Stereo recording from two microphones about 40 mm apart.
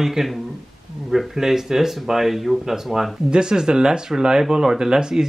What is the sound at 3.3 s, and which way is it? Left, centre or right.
Speech, centre.